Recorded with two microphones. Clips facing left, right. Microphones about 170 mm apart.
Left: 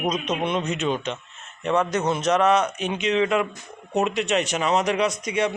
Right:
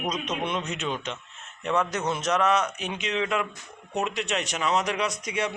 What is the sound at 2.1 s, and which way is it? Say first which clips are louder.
Speech: left 5 dB; centre (ahead or behind).